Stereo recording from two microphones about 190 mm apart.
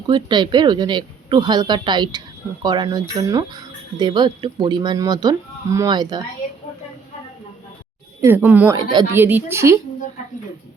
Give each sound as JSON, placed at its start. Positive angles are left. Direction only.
{"t": 0.1, "sound": "speech", "side_deg": -25}
{"t": 8.2, "sound": "a woman's voice", "side_deg": -10}